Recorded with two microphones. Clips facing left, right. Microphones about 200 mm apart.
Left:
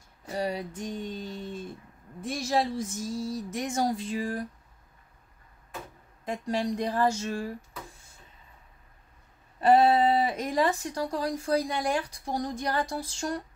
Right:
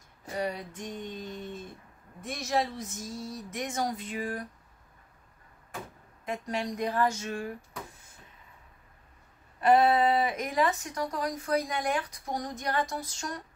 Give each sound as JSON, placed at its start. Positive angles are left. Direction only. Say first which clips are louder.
{"t": 0.4, "sound": "female singing", "louder": "left 2 dB", "side_deg": 35}
{"t": 2.2, "sound": "speech", "louder": "left 3 dB", "side_deg": 35}
{"t": 6.2, "sound": "speech", "louder": "left 4 dB", "side_deg": 30}
{"t": 9.6, "sound": "speech", "louder": "left 2 dB", "side_deg": 30}
{"t": 12.9, "sound": "female singing", "louder": "left 5 dB", "side_deg": 30}